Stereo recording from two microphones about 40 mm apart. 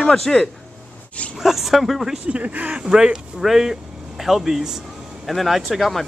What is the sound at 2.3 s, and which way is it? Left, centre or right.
Speech, right.